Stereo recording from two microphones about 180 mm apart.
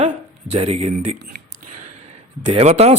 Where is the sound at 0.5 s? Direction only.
35° right (ahead or behind).